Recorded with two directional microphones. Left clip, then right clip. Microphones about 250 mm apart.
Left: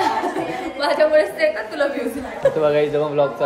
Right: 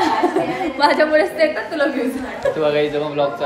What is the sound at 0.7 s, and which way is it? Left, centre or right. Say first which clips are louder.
Speech: right 1 dB; right.